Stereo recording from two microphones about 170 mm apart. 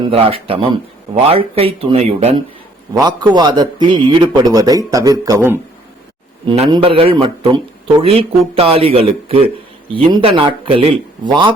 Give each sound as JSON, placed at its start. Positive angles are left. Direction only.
{"t": 0.0, "sound": "speech", "side_deg": -35}
{"t": 2.9, "sound": "a man's voice", "side_deg": -25}